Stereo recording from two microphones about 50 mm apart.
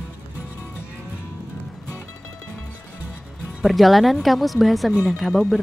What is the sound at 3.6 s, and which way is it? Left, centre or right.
Speech, centre.